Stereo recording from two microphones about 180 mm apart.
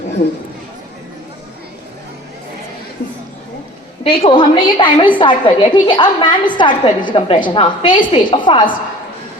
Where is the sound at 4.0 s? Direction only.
30° left (ahead or behind).